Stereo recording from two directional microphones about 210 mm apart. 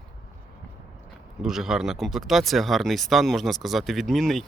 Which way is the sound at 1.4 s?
Centre (ahead or behind).